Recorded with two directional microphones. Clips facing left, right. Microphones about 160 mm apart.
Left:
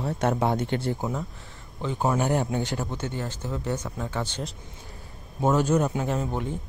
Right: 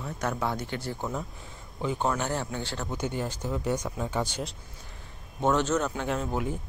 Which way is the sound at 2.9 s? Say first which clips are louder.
Right 1 dB; 15° right (ahead or behind).